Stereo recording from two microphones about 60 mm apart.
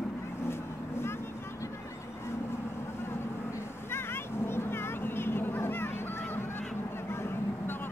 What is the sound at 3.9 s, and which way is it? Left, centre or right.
Vehicle, left.